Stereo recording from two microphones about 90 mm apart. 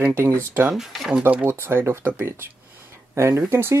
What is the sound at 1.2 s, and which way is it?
Speech, 25° right (ahead or behind).